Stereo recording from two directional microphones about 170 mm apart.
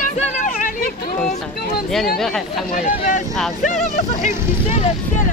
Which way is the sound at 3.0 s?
50° left (ahead or behind).